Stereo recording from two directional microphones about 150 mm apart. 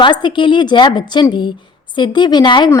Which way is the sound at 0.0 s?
30° left (ahead or behind).